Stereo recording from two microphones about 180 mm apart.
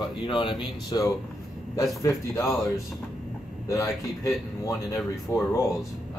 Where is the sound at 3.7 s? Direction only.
15° left (ahead or behind).